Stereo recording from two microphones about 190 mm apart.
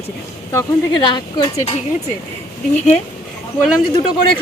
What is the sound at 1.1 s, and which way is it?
Speech, 25° left (ahead or behind).